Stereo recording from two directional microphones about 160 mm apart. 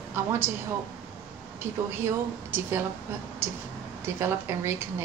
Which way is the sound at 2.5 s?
15° right (ahead or behind).